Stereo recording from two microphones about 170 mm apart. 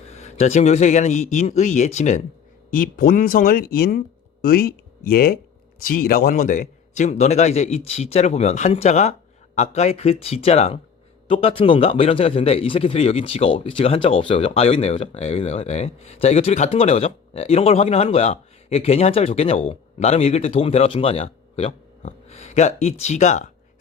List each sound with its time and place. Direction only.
0.1 s speech: 40° left (ahead or behind)
2.6 s a man's voice: 55° left (ahead or behind)